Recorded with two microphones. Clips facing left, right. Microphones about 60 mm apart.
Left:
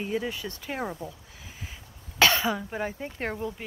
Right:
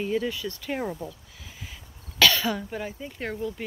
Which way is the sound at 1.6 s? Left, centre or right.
Left.